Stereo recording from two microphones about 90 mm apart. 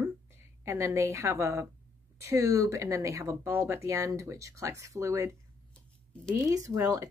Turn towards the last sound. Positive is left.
turn(degrees=-40)  # may be behind; listen again after turning